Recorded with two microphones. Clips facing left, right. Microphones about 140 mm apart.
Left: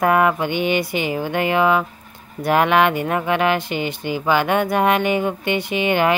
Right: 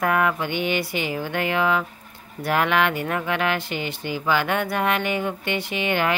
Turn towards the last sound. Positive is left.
turn(degrees=15)  # may be behind; listen again after turning